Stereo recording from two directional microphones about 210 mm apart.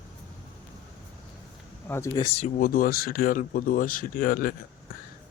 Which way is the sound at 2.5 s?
40° left (ahead or behind).